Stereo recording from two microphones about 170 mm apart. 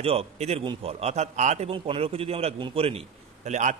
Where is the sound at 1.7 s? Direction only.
35° right (ahead or behind).